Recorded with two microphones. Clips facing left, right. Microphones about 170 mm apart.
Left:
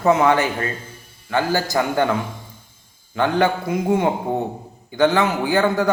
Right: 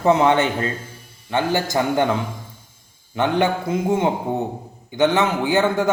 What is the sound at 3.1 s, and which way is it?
A man's voice, 20° right (ahead or behind).